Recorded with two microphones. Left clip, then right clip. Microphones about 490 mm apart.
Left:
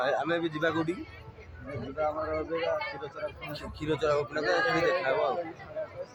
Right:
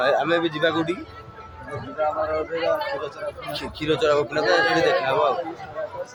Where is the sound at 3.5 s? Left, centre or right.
Left.